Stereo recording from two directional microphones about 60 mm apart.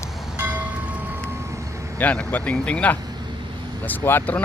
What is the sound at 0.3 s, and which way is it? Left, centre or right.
Train, right.